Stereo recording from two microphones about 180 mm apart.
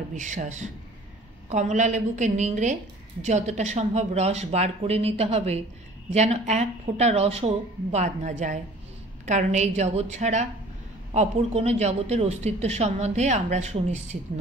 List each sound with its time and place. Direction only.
0.1 s a woman's voice: 45° right (ahead or behind)